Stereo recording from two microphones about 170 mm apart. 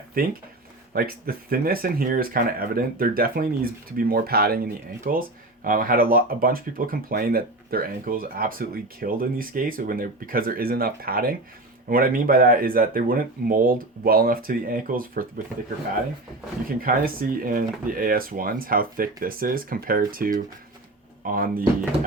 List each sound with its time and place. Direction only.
0.2 s speech: 55° right (ahead or behind)
16.8 s speech: 55° right (ahead or behind)